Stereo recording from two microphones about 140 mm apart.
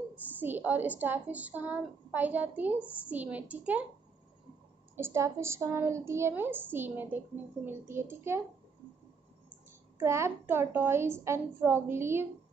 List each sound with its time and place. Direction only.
0.1 s a woman's voice: 10° right (ahead or behind)
4.9 s a woman's voice: 20° right (ahead or behind)
9.9 s a woman's voice: 20° right (ahead or behind)